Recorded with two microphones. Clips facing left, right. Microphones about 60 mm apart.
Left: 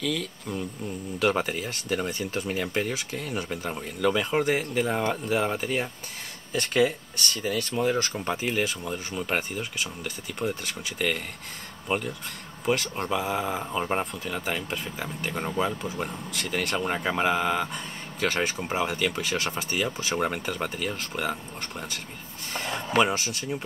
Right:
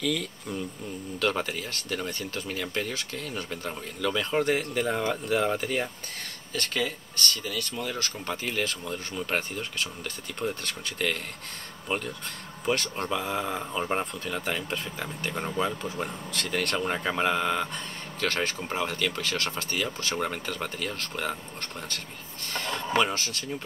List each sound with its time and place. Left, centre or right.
0.0 s speech: centre
1.2 s speech: centre
6.5 s speech: centre